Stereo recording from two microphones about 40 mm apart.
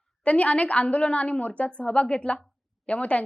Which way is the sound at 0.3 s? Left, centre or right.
Left.